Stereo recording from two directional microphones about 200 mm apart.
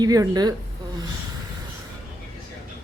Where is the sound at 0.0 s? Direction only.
20° right (ahead or behind).